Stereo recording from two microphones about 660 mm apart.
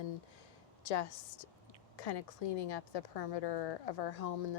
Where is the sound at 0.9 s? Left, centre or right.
Left.